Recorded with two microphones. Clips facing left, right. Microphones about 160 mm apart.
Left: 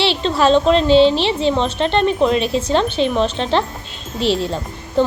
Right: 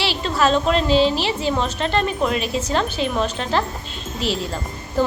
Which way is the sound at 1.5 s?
30° left (ahead or behind).